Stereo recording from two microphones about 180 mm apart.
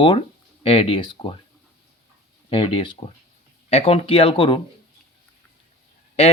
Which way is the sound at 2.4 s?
30° left (ahead or behind).